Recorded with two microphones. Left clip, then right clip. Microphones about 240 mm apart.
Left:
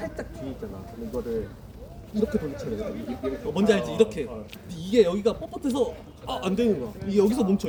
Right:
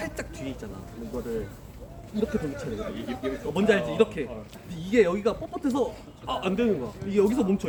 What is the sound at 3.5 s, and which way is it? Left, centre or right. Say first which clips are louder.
A man's voice: left 1 dB; centre.